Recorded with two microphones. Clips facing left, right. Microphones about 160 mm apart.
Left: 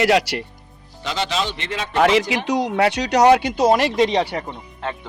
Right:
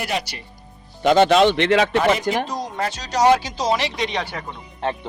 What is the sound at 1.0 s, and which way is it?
Speech, 55° right (ahead or behind).